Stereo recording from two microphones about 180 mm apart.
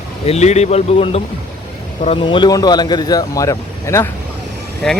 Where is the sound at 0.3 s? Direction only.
40° left (ahead or behind); by 4.1 s 15° left (ahead or behind).